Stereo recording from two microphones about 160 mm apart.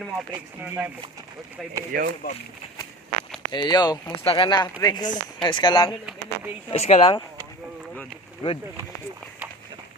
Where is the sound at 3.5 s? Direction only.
25° left (ahead or behind).